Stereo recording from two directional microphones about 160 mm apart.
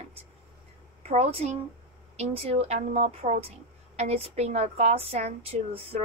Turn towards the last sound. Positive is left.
turn(degrees=-40)  # may be behind; listen again after turning